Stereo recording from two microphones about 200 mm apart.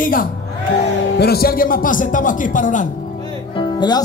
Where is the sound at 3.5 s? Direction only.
20° left (ahead or behind).